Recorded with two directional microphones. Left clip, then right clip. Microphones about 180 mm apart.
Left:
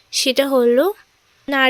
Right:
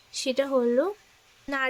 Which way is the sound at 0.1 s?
25° left (ahead or behind).